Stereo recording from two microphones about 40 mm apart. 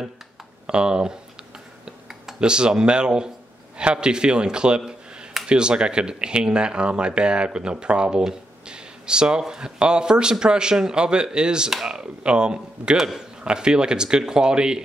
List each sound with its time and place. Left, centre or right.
0.7 s speech: right
2.4 s speech: right
8.2 s a sound: centre
9.4 s speech: centre
12.9 s a man's voice: centre
13.4 s speech: right